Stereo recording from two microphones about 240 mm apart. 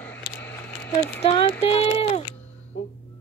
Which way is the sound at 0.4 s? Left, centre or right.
Centre.